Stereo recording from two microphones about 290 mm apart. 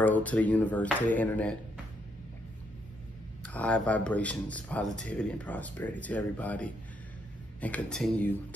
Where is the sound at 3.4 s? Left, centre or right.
Centre.